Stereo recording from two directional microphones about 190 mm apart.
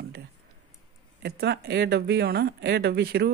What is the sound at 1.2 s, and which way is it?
Speech, 55° right (ahead or behind).